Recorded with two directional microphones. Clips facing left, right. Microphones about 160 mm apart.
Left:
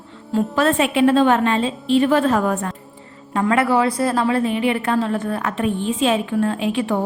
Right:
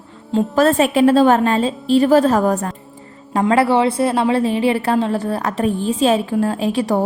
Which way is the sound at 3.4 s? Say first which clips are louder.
Right 3 dB; 25° right (ahead or behind).